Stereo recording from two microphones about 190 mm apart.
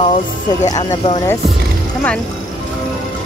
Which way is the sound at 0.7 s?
20° left (ahead or behind).